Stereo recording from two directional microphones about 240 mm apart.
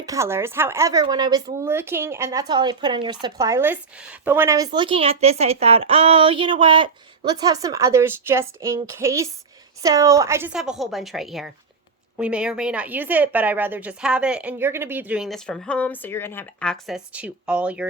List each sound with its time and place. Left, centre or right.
0.0 s speech: centre